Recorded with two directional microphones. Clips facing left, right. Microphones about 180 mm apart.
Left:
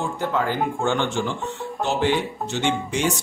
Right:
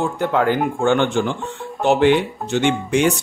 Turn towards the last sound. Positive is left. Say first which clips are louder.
# right 6 dB
turn(degrees=-55)  # may be behind; listen again after turning